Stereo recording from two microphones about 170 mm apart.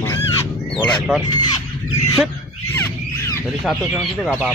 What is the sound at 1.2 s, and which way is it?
Speech, 25° left (ahead or behind).